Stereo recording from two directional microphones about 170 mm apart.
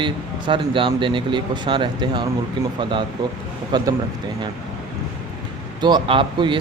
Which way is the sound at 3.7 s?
25° right (ahead or behind).